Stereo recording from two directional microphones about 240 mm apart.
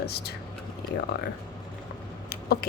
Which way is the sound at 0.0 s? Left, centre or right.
Left.